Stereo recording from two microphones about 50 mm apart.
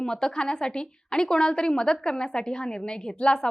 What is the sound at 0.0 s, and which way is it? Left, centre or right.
A woman's voice, centre.